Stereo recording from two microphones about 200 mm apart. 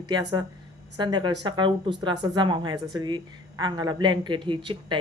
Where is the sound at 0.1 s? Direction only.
20° right (ahead or behind).